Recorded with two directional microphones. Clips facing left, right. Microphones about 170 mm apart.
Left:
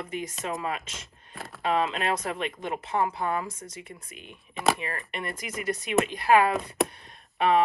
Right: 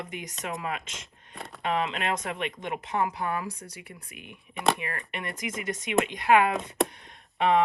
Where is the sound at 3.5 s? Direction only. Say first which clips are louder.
Right 1 dB; 35° right (ahead or behind).